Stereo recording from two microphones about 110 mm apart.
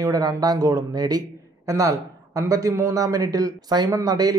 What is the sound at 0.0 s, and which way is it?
A man's voice, 35° right (ahead or behind).